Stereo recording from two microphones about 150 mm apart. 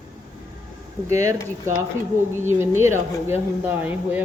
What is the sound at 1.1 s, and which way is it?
Speech, 20° right (ahead or behind).